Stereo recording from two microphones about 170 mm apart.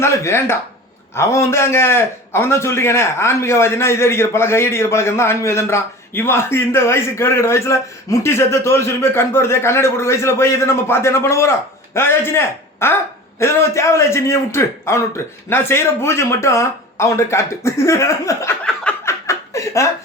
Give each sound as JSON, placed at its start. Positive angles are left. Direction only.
{"t": 0.0, "sound": "a man's voice", "side_deg": 15}
{"t": 18.6, "sound": "a sound", "side_deg": 5}
{"t": 19.3, "sound": "chuckle", "side_deg": 15}